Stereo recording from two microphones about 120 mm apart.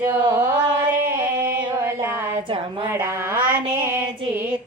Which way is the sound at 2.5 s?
45° right (ahead or behind).